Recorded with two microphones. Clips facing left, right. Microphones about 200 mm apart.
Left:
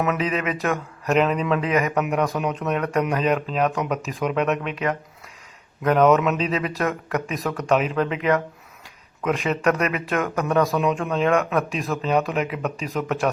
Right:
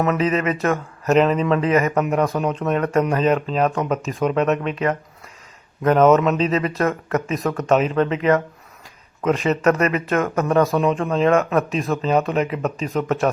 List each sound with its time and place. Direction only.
0.0 s speech: centre (ahead or behind)